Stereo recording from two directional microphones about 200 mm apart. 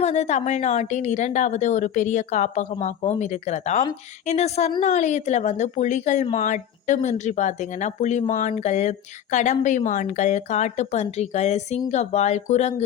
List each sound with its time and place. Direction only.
0.0 s speech: 35° left (ahead or behind)